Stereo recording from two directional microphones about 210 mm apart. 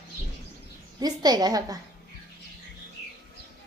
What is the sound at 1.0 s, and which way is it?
Speech, 20° right (ahead or behind).